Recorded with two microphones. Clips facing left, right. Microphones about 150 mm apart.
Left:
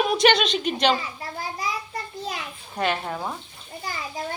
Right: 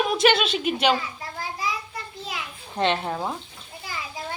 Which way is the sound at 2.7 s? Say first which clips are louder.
Right 2 dB; 25° right (ahead or behind).